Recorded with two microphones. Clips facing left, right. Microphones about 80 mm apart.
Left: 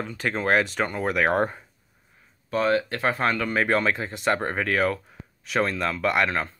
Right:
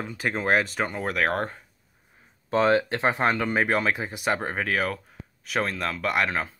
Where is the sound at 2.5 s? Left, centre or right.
Right; by 6.5 s centre.